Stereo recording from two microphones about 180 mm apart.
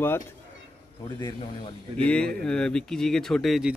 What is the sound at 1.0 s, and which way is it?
Speech, 25° left (ahead or behind).